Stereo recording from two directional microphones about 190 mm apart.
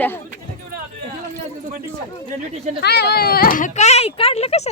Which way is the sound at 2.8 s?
55° left (ahead or behind).